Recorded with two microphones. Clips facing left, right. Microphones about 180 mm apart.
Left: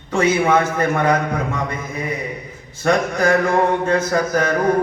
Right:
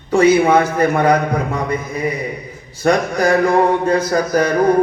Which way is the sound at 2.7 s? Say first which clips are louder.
Right 2 dB; 35° right (ahead or behind).